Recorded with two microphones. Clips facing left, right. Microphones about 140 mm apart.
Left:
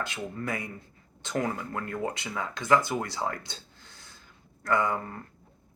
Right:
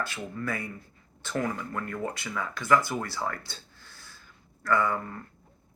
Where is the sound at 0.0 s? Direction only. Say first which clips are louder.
Even; 20° left (ahead or behind).